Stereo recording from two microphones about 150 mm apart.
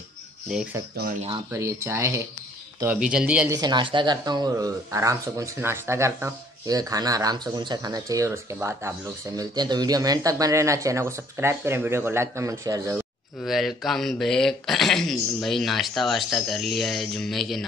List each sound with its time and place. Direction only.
1.5 s speech: 20° right (ahead or behind)
3.1 s speech: 5° right (ahead or behind)
3.4 s speech: 25° right (ahead or behind)
9.4 s speech: 30° right (ahead or behind)
13.4 s speech: centre (ahead or behind)